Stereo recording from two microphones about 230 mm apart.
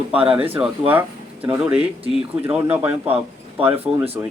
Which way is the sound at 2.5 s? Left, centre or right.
Centre.